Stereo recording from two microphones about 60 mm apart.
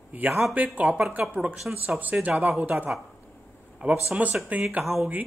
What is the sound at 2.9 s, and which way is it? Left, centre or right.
Speech, centre.